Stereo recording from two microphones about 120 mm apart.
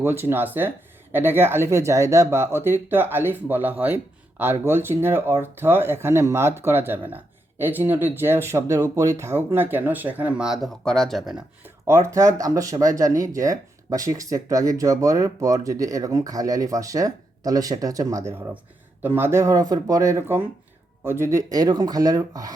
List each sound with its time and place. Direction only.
0.0 s speech: 20° right (ahead or behind); by 11.4 s centre (ahead or behind)
11.6 s speech: 20° right (ahead or behind)